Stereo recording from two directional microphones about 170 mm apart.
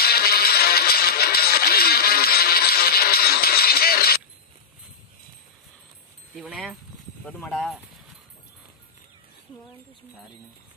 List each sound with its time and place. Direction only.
0.0 s music: 65° left (ahead or behind)
6.3 s a sound: 5° right (ahead or behind)
7.2 s speech: 5° left (ahead or behind)